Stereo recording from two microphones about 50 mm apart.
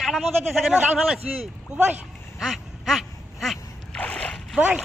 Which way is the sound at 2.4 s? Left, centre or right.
Centre.